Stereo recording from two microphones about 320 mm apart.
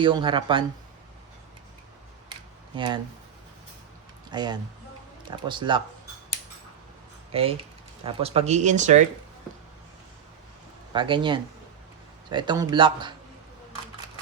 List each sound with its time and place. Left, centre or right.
0.0 s speech: centre
2.7 s speech: centre
4.3 s speech: centre
7.3 s speech: centre
10.9 s speech: centre